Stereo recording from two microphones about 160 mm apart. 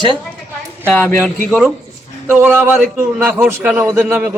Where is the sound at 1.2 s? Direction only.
Centre (ahead or behind).